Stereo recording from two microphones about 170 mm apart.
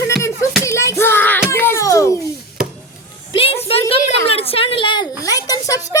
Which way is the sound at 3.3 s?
30° left (ahead or behind).